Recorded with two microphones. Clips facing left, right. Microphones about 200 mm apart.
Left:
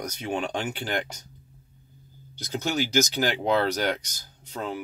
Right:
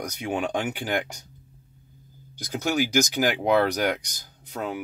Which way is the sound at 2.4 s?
10° right (ahead or behind).